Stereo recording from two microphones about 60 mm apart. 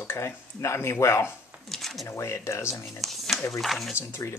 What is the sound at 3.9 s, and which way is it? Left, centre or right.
Speech, left.